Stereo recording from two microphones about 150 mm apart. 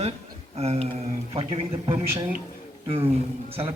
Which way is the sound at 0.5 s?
45° right (ahead or behind).